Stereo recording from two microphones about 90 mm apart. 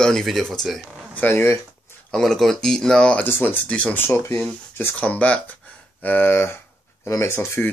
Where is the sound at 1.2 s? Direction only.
25° left (ahead or behind).